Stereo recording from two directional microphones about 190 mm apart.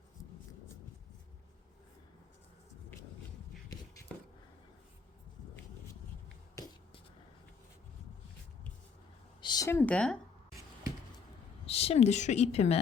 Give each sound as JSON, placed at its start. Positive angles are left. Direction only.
{"t": 9.4, "sound": "speech", "side_deg": 20}
{"t": 11.6, "sound": "speech", "side_deg": 30}